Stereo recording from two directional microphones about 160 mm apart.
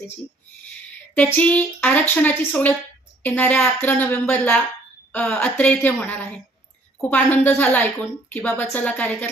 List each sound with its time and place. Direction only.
1.1 s speech: 10° left (ahead or behind)